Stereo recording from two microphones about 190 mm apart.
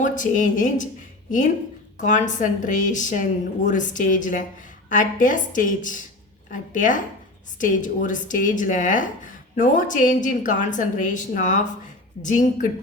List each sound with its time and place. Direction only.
0.0 s a woman's voice: 40° left (ahead or behind)
2.0 s a woman's voice: 40° left (ahead or behind)